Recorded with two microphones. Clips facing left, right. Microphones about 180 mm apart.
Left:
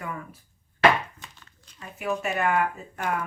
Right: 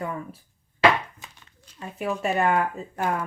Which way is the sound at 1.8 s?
30° right (ahead or behind).